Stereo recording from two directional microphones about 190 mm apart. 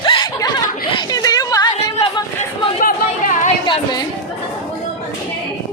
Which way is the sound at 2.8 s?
45° left (ahead or behind).